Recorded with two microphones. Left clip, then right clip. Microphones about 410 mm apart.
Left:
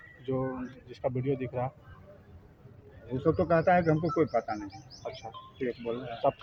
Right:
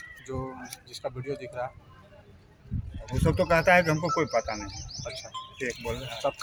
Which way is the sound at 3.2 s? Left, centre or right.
Left.